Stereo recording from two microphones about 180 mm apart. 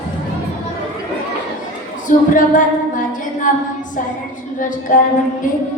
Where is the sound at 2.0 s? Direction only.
45° left (ahead or behind).